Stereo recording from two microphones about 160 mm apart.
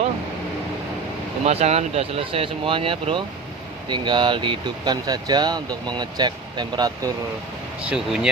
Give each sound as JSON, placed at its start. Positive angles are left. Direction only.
{"t": 1.5, "sound": "speech", "side_deg": -40}
{"t": 7.9, "sound": "speech", "side_deg": -5}